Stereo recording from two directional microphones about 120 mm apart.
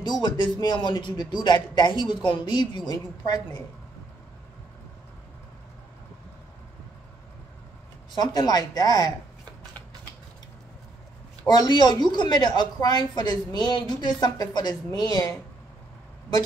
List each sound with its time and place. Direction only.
0.0 s speech: 40° left (ahead or behind)
8.2 s speech: 35° left (ahead or behind)
11.4 s speech: 35° left (ahead or behind)